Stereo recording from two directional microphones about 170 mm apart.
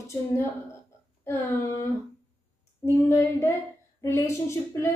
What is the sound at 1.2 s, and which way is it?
Speech, 15° left (ahead or behind).